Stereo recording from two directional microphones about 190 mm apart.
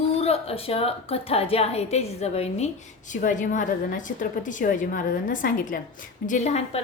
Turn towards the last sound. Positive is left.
turn(degrees=35)  # may be behind; listen again after turning